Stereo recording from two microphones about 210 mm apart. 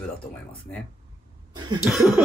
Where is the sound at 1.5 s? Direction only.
20° right (ahead or behind).